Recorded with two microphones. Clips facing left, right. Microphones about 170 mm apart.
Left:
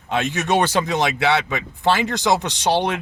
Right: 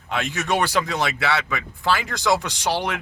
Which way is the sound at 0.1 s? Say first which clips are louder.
Left 4 dB; 20° left (ahead or behind).